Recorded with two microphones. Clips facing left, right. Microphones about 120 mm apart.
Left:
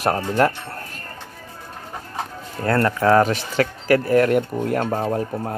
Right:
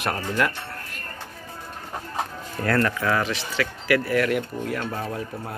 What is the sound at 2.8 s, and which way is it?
Speech, 35° left (ahead or behind).